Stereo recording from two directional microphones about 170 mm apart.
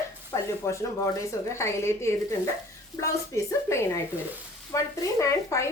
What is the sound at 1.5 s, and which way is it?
Speech, 15° left (ahead or behind).